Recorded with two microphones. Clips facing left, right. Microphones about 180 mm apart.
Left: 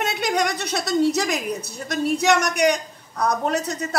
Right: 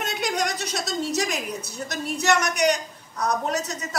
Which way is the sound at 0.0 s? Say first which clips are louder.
Left 4 dB; 65° left (ahead or behind).